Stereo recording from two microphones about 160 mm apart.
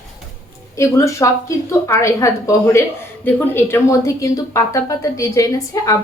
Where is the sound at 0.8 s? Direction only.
20° left (ahead or behind).